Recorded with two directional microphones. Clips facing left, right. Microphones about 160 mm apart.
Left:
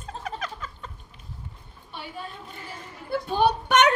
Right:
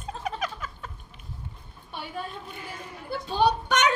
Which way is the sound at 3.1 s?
55° left (ahead or behind).